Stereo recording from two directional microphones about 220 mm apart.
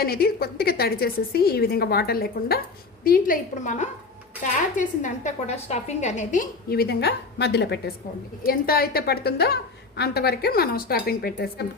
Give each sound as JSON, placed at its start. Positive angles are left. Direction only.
{"t": 0.0, "sound": "a woman's voice", "side_deg": 45}